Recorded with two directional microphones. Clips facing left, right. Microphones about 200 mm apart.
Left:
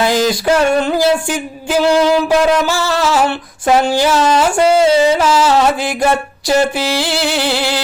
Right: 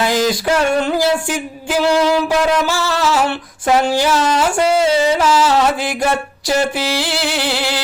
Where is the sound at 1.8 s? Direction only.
50° left (ahead or behind).